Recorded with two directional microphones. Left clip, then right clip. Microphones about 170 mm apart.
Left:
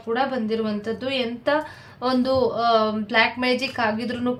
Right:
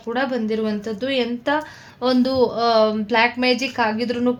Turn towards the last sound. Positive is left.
turn(degrees=-30)  # may be behind; listen again after turning